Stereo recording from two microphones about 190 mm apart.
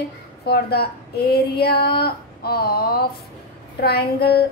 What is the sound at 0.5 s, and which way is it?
Speech, 55° left (ahead or behind).